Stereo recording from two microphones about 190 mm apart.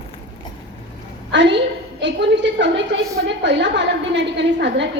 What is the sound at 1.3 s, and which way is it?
A woman's voice, 70° right (ahead or behind).